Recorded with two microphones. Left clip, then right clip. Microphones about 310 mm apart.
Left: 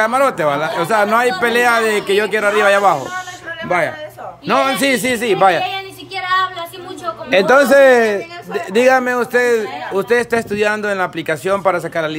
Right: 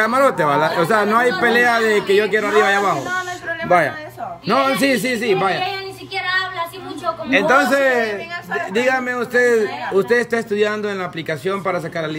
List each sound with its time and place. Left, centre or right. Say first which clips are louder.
0.0 s a man's voice: left 1 dB; centre
7.2 s a man's voice: left 4 dB; centre